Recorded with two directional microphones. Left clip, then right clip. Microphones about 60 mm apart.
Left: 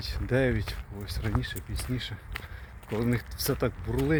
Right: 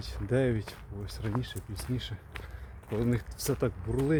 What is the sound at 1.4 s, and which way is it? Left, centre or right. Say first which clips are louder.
Speech: left 4 dB; right.